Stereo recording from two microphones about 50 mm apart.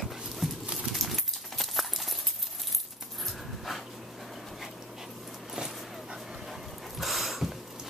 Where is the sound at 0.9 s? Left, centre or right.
Centre.